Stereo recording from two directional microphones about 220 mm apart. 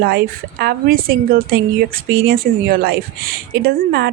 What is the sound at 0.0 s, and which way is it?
A woman's voice, 45° right (ahead or behind).